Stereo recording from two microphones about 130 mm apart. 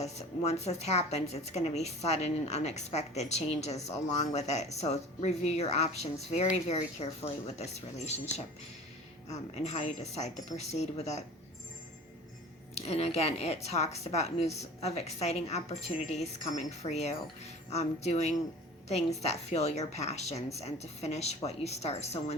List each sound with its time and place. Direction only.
0.0 s a woman's voice: 55° left (ahead or behind)
9.3 s a woman's voice: 60° left (ahead or behind)
12.7 s a woman's voice: 55° left (ahead or behind)